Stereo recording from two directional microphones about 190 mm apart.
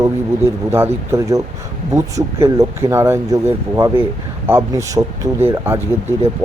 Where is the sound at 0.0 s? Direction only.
15° right (ahead or behind).